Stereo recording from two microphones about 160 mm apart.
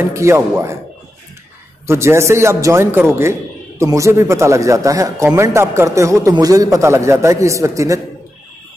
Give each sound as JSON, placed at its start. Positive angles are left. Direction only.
{"t": 0.0, "sound": "a man's voice", "side_deg": -15}
{"t": 1.9, "sound": "a man's voice", "side_deg": -15}